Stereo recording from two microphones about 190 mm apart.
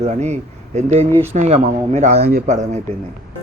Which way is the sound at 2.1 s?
60° right (ahead or behind).